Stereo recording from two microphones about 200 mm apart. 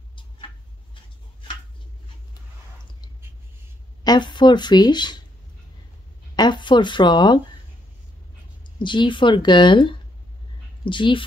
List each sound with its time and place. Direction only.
4.0 s speech: 20° left (ahead or behind)
6.3 s speech: 20° left (ahead or behind)
8.7 s speech: 25° left (ahead or behind)